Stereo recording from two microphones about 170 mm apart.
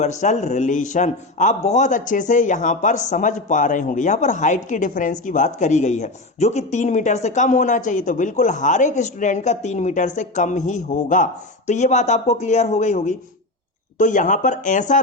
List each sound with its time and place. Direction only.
0.0 s a man's voice: 45° left (ahead or behind)